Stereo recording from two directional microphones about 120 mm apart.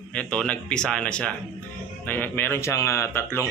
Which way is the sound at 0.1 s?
10° left (ahead or behind).